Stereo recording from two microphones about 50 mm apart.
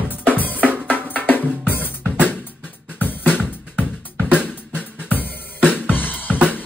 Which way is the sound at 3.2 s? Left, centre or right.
Centre.